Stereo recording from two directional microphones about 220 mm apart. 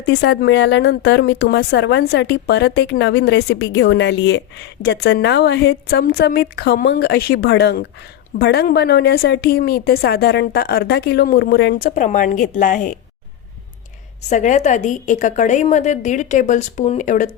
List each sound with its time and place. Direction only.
0.0 s a woman's voice: 50° left (ahead or behind)
14.2 s a woman's voice: 30° left (ahead or behind)